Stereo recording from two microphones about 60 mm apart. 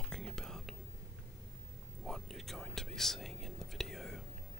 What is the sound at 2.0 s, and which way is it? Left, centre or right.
Whispering, centre.